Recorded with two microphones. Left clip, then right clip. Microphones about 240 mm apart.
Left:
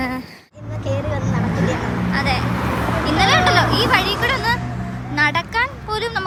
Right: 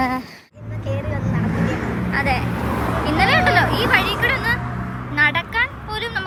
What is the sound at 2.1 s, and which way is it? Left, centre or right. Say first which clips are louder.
Speech: even; centre.